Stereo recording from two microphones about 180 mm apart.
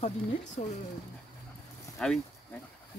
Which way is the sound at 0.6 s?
35° left (ahead or behind).